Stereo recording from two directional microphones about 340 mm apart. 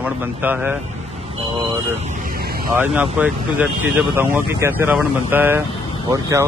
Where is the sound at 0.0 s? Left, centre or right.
Centre.